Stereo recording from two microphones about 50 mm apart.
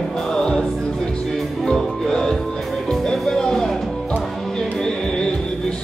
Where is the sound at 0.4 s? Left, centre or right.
Centre.